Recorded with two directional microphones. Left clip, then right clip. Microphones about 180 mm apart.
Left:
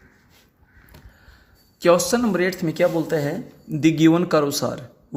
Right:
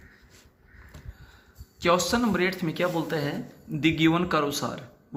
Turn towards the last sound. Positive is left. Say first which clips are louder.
# left 6 dB
turn(degrees=45)  # may be behind; listen again after turning